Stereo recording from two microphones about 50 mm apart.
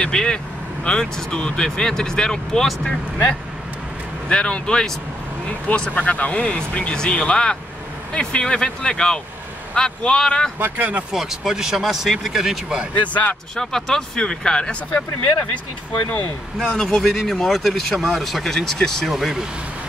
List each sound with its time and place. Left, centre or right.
0.0 s speech: centre
4.3 s speech: centre
10.6 s speech: right
11.1 s speech: centre
13.0 s speech: left
13.6 s speech: centre
15.9 s speech: left
16.5 s speech: centre
19.0 s speech: centre